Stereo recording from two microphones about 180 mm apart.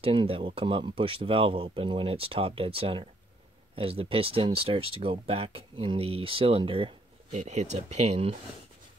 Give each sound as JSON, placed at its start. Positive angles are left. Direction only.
{"t": 0.0, "sound": "speech", "side_deg": -30}